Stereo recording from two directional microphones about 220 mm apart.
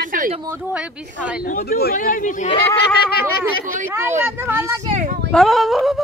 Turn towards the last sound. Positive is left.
turn(degrees=0)  # may be behind; listen again after turning